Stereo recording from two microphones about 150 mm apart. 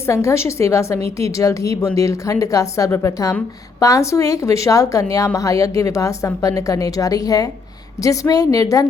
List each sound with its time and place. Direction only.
0.1 s a woman's voice: 20° left (ahead or behind)